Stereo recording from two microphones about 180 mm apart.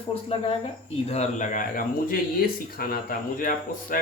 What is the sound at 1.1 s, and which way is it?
Speech, 40° left (ahead or behind).